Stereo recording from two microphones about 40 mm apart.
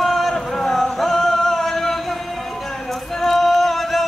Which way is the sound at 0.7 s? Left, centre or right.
Centre.